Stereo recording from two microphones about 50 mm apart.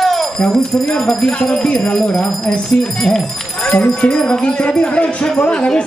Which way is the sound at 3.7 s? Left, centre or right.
Left.